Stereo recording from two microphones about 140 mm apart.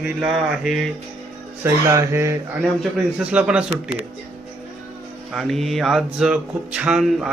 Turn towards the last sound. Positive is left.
turn(degrees=-5)  # may be behind; listen again after turning